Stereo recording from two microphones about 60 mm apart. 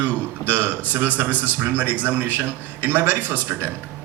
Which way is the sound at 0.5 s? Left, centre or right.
Right.